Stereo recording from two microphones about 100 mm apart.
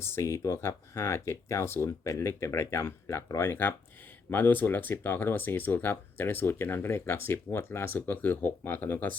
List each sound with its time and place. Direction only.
0.0 s speech: 25° left (ahead or behind)